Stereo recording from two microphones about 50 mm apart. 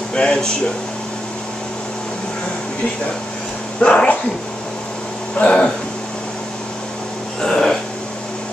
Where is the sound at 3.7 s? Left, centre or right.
Left.